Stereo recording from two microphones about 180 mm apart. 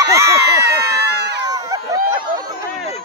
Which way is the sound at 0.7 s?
65° right (ahead or behind).